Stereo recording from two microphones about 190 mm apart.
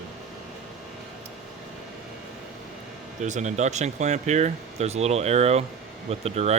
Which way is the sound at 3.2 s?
40° right (ahead or behind).